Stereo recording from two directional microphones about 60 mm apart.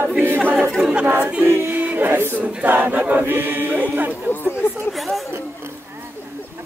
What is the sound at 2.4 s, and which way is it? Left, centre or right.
A capella, right.